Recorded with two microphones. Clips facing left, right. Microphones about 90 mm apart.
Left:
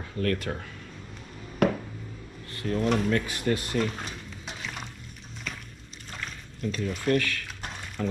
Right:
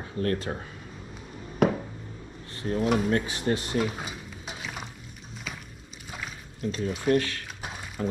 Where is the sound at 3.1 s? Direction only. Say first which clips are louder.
Right 1 dB; 30° right (ahead or behind).